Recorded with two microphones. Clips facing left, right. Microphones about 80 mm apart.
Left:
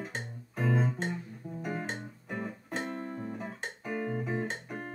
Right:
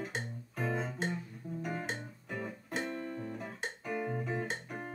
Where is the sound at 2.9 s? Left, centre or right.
Left.